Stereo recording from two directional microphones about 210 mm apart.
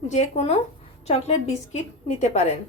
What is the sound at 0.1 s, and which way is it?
Speech, 30° left (ahead or behind).